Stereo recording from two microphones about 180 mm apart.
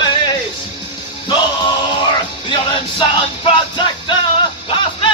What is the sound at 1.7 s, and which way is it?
Music, 25° left (ahead or behind).